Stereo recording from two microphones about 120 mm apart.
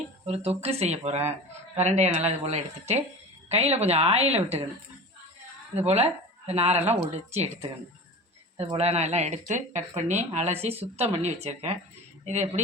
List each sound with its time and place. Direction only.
0.3 s speech: 60° right (ahead or behind)
5.7 s speech: 60° right (ahead or behind)
8.5 s speech: 55° right (ahead or behind)
12.2 s a woman's voice: 80° right